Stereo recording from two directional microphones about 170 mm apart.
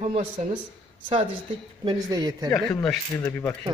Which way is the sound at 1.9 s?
20° right (ahead or behind).